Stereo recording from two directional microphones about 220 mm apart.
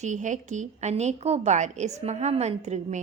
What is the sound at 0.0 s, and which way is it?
A woman's voice, 35° right (ahead or behind).